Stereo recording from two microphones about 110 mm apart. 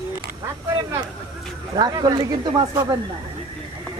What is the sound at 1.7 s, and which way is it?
Speech, 40° right (ahead or behind).